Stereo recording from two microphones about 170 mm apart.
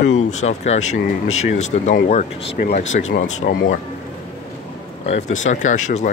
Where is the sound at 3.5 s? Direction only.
65° left (ahead or behind).